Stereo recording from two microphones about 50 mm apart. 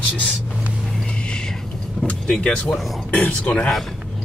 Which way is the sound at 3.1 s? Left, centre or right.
Left.